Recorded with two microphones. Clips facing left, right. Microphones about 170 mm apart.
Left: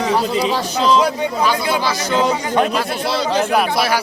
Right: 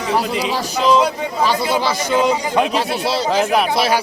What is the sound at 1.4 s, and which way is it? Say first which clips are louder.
Speech: right 2 dB; 25° right (ahead or behind).